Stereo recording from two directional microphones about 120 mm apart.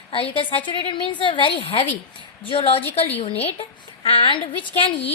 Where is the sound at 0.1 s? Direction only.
50° left (ahead or behind).